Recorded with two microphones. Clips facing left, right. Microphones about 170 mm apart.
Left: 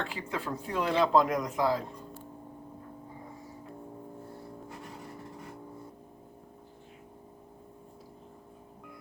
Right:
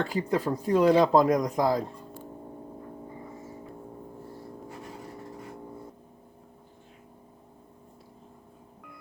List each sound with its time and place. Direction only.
0.0 s speech: 40° right (ahead or behind)